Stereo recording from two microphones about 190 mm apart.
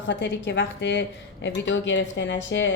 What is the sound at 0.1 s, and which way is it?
Speech, 70° left (ahead or behind).